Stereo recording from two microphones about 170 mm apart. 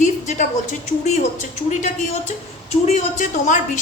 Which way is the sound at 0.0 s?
45° left (ahead or behind).